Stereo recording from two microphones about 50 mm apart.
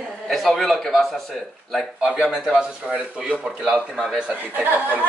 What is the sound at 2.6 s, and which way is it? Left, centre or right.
Speech, right.